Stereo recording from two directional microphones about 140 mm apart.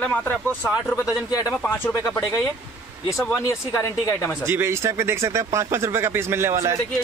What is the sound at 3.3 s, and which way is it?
Speech, 20° left (ahead or behind).